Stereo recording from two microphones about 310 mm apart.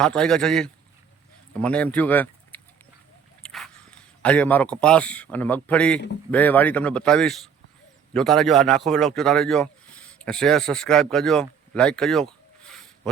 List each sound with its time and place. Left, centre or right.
0.0 s speech: centre
3.4 s a sound: centre
4.2 s a man's voice: centre